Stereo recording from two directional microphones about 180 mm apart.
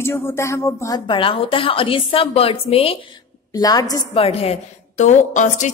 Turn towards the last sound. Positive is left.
turn(degrees=45)  # may be behind; listen again after turning